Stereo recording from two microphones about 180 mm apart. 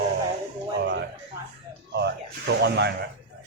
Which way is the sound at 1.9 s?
70° right (ahead or behind).